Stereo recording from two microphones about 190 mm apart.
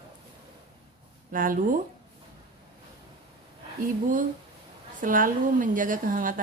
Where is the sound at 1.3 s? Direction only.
45° right (ahead or behind).